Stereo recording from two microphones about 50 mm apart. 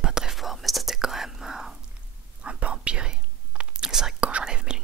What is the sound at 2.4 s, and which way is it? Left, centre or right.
Whispering, right.